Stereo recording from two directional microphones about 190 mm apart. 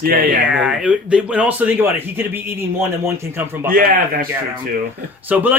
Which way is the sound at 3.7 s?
50° right (ahead or behind).